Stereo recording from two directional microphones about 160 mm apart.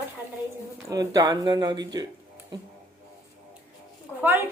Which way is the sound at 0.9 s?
20° right (ahead or behind).